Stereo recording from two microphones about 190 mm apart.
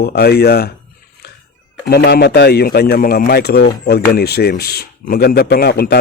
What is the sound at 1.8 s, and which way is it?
A man's voice, 60° left (ahead or behind).